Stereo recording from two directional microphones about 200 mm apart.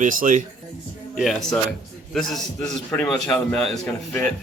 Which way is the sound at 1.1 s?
Centre (ahead or behind).